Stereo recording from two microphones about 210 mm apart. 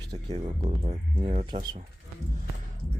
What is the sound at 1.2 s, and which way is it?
Speech, 30° right (ahead or behind).